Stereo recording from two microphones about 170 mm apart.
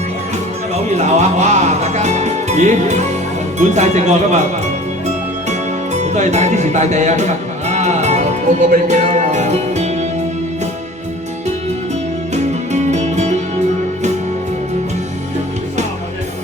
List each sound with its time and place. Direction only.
0.9 s music: 40° right (ahead or behind)
3.6 s speech: 45° right (ahead or behind)
5.0 s music: 45° right (ahead or behind)
8.7 s speech: 45° right (ahead or behind)
12.3 s music: 40° right (ahead or behind)